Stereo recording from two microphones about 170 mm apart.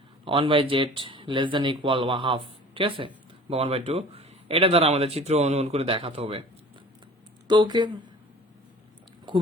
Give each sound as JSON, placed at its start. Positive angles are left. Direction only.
{"t": 0.3, "sound": "speech", "side_deg": -30}
{"t": 7.4, "sound": "speech", "side_deg": -25}